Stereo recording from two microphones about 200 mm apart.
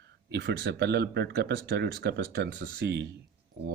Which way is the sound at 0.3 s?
55° right (ahead or behind).